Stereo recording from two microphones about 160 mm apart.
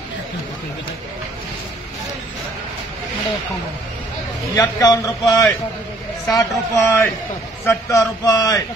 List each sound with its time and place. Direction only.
4.6 s a man's voice: 20° left (ahead or behind)